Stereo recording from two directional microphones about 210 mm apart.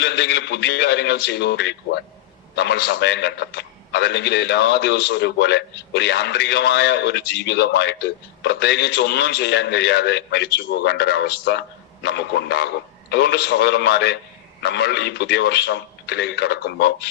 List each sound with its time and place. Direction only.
0.0 s a man's voice: 50° left (ahead or behind)